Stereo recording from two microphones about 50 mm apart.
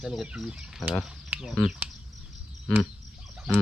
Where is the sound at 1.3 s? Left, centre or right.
Right.